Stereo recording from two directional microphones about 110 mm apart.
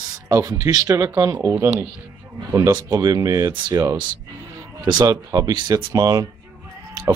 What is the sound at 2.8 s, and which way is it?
Speech, 35° right (ahead or behind).